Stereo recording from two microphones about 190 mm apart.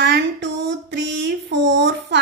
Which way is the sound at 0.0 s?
65° right (ahead or behind).